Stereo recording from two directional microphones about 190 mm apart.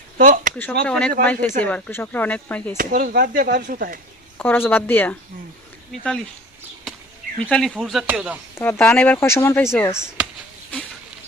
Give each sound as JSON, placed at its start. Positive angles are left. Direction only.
{"t": 0.2, "sound": "speech", "side_deg": -45}
{"t": 0.9, "sound": "speech", "side_deg": 5}
{"t": 2.7, "sound": "speech", "side_deg": -50}
{"t": 4.4, "sound": "speech", "side_deg": 10}
{"t": 7.5, "sound": "speech", "side_deg": 5}
{"t": 8.5, "sound": "speech", "side_deg": 10}